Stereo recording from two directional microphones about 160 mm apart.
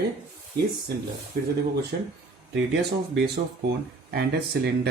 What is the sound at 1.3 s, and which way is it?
Speech, 70° right (ahead or behind).